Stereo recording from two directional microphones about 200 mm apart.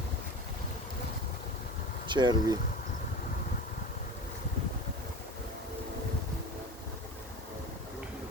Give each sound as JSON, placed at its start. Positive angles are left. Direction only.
{"t": 2.0, "sound": "speech", "side_deg": -20}